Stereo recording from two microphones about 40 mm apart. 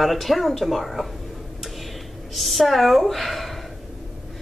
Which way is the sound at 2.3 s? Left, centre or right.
Centre.